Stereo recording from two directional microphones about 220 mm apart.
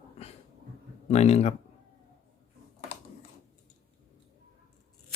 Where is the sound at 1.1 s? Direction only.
30° left (ahead or behind).